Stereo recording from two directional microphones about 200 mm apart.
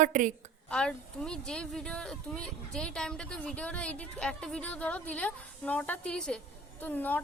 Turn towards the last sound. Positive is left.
turn(degrees=10)  # may be behind; listen again after turning